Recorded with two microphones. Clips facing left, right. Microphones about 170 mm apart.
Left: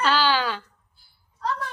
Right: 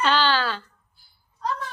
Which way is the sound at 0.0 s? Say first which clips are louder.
Even; 5° left (ahead or behind).